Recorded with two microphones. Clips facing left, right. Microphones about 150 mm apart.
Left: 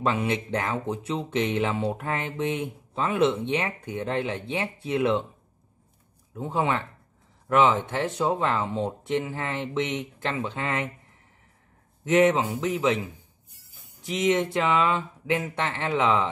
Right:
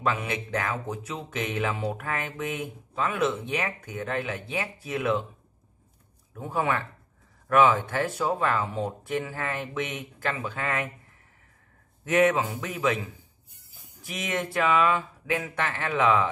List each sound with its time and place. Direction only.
0.0 s speech: 30° left (ahead or behind)
6.3 s speech: 20° left (ahead or behind)
12.0 s speech: 20° left (ahead or behind)
14.0 s speech: 20° left (ahead or behind)